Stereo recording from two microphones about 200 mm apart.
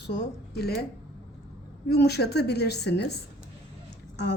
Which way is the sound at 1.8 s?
55° left (ahead or behind).